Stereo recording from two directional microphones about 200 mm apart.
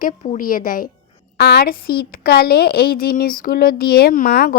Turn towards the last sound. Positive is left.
turn(degrees=50)  # may be behind; listen again after turning